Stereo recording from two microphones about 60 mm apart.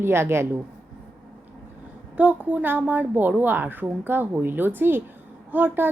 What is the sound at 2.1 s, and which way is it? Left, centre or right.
A woman's voice, right.